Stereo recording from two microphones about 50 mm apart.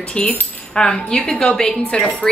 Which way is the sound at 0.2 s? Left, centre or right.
Left.